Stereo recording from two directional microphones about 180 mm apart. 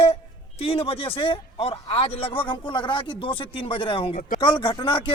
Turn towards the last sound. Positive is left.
turn(degrees=30)  # may be behind; listen again after turning